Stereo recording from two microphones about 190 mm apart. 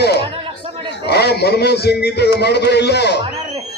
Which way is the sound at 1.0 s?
60° left (ahead or behind).